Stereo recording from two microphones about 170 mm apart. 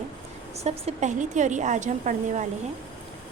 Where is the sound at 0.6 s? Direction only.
40° right (ahead or behind).